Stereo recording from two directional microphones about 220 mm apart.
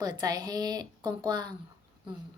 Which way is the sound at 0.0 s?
20° right (ahead or behind).